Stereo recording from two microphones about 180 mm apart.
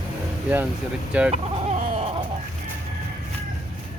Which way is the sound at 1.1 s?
5° right (ahead or behind).